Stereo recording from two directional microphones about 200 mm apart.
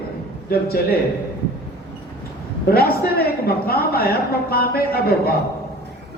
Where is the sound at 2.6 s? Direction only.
50° left (ahead or behind).